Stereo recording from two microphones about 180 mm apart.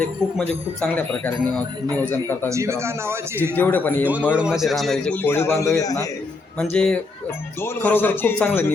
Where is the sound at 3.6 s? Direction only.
10° left (ahead or behind).